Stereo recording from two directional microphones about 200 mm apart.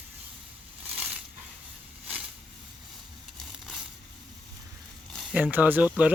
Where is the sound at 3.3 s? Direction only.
Centre (ahead or behind).